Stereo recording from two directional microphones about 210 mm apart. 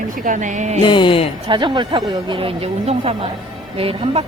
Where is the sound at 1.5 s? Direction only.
20° right (ahead or behind).